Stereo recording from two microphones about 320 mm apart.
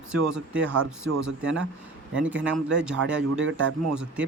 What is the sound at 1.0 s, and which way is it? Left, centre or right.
Speech, right.